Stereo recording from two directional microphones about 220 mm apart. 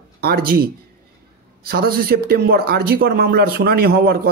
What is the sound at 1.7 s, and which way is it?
Speech, 45° right (ahead or behind).